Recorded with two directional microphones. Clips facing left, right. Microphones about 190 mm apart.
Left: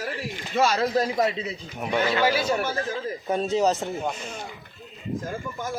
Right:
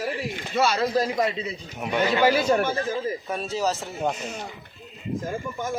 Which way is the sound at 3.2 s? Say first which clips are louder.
Left 5 dB; 25° left (ahead or behind).